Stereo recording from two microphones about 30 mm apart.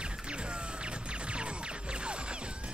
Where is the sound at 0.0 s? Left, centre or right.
Right.